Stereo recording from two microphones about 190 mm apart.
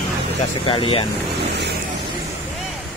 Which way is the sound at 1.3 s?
60° right (ahead or behind).